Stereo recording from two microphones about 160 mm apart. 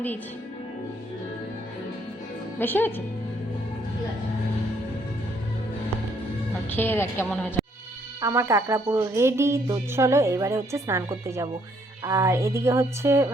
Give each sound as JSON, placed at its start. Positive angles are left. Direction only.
{"t": 2.6, "sound": "a woman's voice", "side_deg": 10}
{"t": 6.7, "sound": "a woman's voice", "side_deg": 10}
{"t": 8.2, "sound": "speech", "side_deg": -20}